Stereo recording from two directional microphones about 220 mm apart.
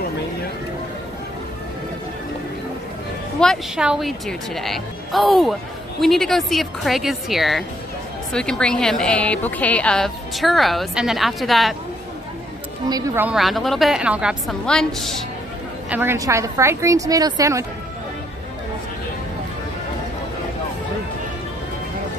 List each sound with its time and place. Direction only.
3.3 s speech: centre (ahead or behind)
12.9 s speech: 10° right (ahead or behind)
15.9 s a woman's voice: 10° right (ahead or behind)